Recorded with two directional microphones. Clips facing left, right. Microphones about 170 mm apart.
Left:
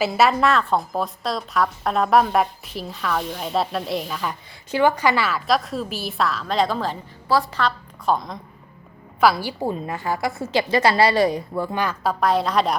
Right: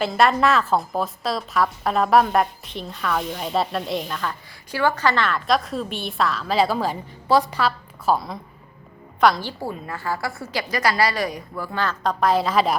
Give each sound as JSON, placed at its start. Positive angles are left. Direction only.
{"t": 0.0, "sound": "a woman's voice", "side_deg": 5}
{"t": 4.3, "sound": "a woman's voice", "side_deg": 20}
{"t": 7.6, "sound": "a woman's voice", "side_deg": -5}
{"t": 9.2, "sound": "a woman's voice", "side_deg": 10}
{"t": 12.2, "sound": "a woman's voice", "side_deg": 0}